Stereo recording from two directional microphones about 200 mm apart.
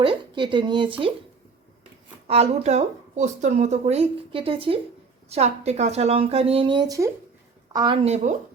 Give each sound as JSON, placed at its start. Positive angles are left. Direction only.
{"t": 0.0, "sound": "speech", "side_deg": -25}
{"t": 2.2, "sound": "a woman's voice", "side_deg": -30}
{"t": 8.0, "sound": "speech", "side_deg": -35}